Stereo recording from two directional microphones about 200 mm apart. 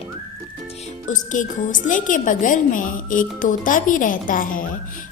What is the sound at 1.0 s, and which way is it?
A woman's voice, 40° left (ahead or behind).